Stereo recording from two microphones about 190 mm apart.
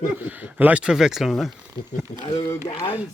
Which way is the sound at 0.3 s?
10° right (ahead or behind).